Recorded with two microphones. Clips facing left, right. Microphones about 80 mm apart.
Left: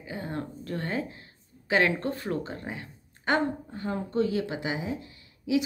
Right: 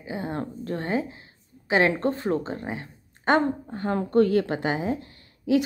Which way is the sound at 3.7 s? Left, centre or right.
Right.